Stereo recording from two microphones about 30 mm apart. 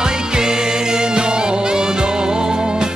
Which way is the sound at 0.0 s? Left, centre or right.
Right.